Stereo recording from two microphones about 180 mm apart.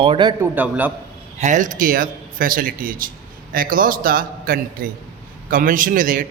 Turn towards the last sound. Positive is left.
turn(degrees=-50)  # may be behind; listen again after turning